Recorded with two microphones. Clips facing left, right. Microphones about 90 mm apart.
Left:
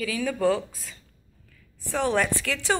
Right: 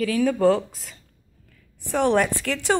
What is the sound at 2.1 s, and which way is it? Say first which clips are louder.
Speech: right 4 dB; 25° right (ahead or behind).